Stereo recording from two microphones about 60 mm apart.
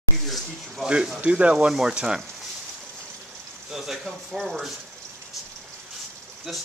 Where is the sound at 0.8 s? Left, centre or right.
Centre.